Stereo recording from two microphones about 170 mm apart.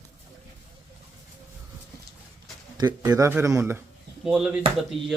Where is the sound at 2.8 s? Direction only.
25° right (ahead or behind).